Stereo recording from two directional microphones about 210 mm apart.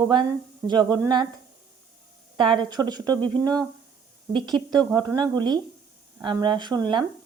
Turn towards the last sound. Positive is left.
turn(degrees=-20)  # may be behind; listen again after turning